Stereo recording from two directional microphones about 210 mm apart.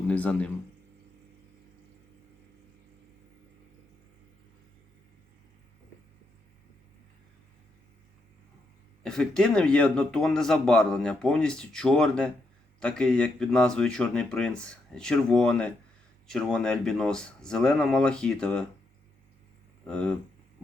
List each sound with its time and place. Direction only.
0.1 s speech: 5° left (ahead or behind)
9.0 s speech: 5° left (ahead or behind)
19.9 s speech: 5° left (ahead or behind)